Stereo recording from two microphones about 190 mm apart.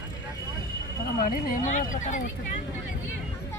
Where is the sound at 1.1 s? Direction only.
45° left (ahead or behind).